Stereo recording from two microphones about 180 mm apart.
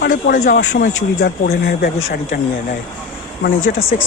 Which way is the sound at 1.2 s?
65° left (ahead or behind).